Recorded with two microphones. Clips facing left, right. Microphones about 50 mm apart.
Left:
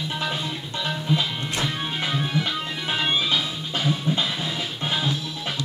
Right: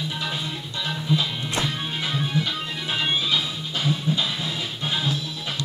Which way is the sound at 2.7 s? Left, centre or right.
Centre.